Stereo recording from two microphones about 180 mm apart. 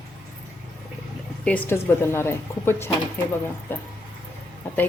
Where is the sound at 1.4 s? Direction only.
10° left (ahead or behind).